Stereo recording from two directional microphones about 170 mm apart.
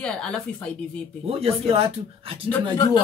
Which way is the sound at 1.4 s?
35° right (ahead or behind).